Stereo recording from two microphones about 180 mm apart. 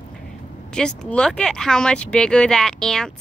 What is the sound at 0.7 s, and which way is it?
Speech, 5° left (ahead or behind).